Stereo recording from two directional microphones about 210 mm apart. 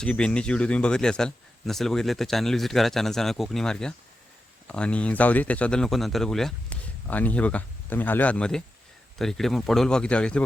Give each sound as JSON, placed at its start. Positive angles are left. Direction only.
{"t": 0.0, "sound": "speech", "side_deg": 5}